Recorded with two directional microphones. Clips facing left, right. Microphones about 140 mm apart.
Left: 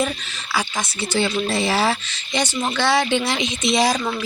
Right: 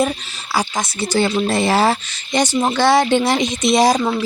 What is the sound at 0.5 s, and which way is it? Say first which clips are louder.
Speech: right 4 dB; 40° right (ahead or behind).